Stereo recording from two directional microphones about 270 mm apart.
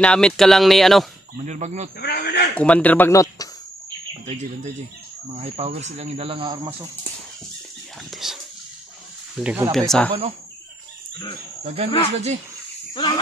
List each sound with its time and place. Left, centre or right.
0.0 s speech: centre
1.4 s speech: right
2.0 s a man's voice: left
2.5 s speech: centre
4.1 s speech: right
8.1 s speech: centre
9.4 s speech: centre
11.6 s speech: right
12.9 s speech: centre